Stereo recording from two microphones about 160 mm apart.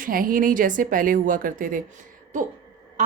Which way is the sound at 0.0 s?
60° right (ahead or behind).